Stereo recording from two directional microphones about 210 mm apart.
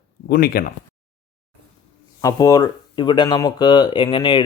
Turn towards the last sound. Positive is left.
turn(degrees=20)  # may be behind; listen again after turning